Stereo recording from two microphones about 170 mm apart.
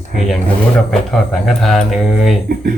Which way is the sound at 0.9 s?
Centre (ahead or behind).